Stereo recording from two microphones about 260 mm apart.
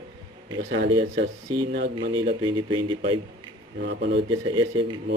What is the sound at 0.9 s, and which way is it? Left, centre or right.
Speech, centre.